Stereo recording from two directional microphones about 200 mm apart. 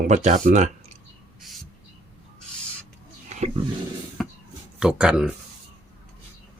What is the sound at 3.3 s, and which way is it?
Roaring cats, 35° right (ahead or behind).